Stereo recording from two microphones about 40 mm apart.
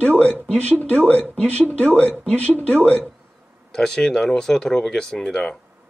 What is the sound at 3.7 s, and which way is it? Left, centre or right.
Speech, centre.